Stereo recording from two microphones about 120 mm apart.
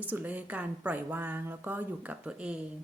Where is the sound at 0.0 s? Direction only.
15° right (ahead or behind).